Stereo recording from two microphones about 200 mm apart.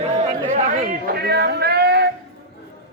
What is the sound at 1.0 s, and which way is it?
Speech, 50° right (ahead or behind).